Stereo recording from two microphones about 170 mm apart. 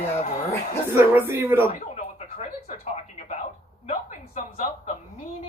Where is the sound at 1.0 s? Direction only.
15° right (ahead or behind).